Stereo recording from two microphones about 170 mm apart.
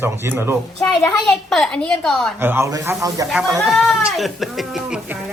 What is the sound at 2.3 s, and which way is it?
Speech, 15° right (ahead or behind).